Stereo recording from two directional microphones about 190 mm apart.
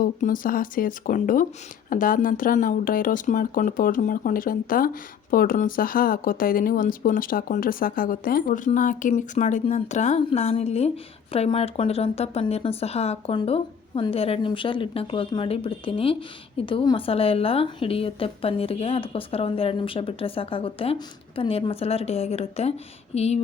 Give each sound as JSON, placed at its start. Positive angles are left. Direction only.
{"t": 0.0, "sound": "a woman's voice", "side_deg": 45}